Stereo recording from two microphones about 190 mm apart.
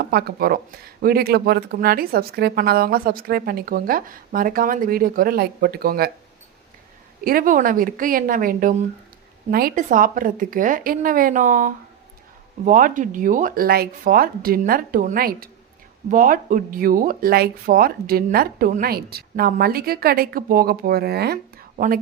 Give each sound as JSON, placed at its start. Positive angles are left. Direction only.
{"t": 0.0, "sound": "speech", "side_deg": -60}
{"t": 7.3, "sound": "speech", "side_deg": -45}